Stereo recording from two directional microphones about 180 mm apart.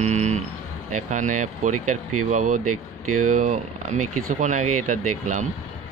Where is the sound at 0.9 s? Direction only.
45° right (ahead or behind).